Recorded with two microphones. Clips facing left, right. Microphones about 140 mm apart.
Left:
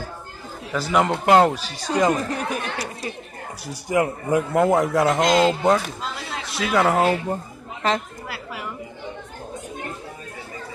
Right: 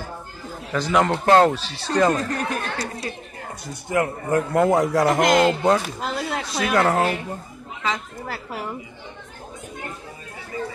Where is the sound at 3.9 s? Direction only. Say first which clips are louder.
Left 1 dB; 15° left (ahead or behind).